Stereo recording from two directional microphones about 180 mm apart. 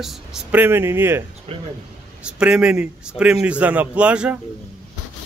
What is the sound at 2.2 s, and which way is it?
A man's voice, 5° right (ahead or behind).